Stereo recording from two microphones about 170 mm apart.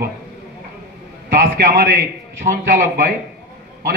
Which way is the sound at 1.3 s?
60° right (ahead or behind).